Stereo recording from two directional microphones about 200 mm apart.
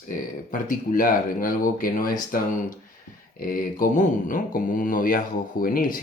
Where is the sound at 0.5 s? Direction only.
40° left (ahead or behind).